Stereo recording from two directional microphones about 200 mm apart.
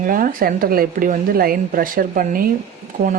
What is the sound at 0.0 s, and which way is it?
Speech, 45° right (ahead or behind).